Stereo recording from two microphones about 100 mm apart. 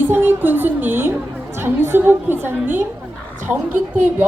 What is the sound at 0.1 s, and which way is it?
Music, 20° right (ahead or behind).